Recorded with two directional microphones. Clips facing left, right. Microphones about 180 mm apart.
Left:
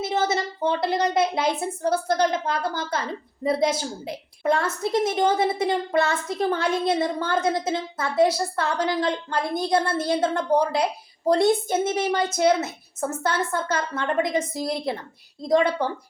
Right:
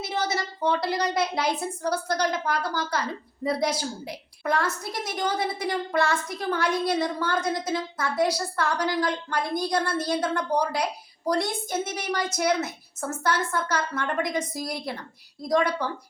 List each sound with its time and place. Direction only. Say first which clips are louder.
0.0 s a woman's voice: left 4 dB; 25° left (ahead or behind)